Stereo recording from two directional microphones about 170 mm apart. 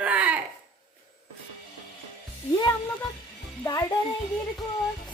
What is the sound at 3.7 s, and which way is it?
Music, 20° left (ahead or behind).